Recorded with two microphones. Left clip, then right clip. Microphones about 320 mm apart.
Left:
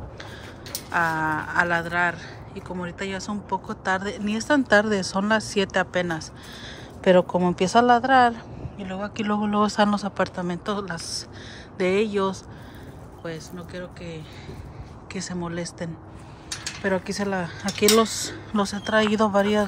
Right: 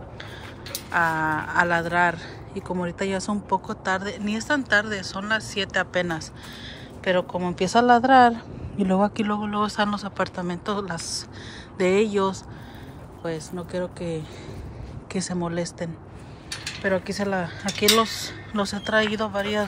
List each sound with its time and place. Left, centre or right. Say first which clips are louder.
0.7 s speech: right 1 dB; centre
15.2 s speech: right 3 dB; centre